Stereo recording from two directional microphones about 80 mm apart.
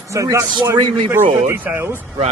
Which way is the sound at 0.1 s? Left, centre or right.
Right.